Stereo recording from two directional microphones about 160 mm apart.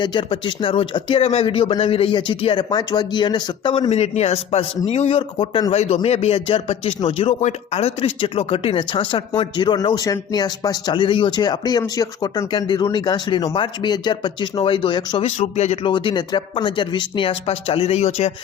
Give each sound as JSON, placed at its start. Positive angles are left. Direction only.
{"t": 0.0, "sound": "speech", "side_deg": 30}
{"t": 3.8, "sound": "a man's voice", "side_deg": 45}